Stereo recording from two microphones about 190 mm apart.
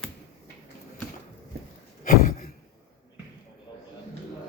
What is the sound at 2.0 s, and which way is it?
Sigh, 45° left (ahead or behind).